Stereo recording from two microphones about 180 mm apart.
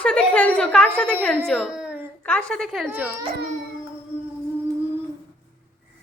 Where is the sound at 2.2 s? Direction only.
5° left (ahead or behind).